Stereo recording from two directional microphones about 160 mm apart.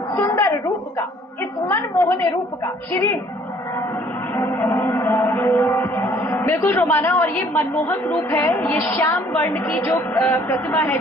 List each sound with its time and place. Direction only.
0.1 s a sound: 15° left (ahead or behind)
1.6 s music: 15° left (ahead or behind)
4.4 s music: 15° left (ahead or behind)